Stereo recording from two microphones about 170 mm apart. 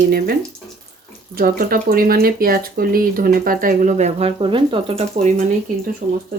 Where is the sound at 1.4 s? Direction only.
60° right (ahead or behind); by 5.3 s 40° right (ahead or behind).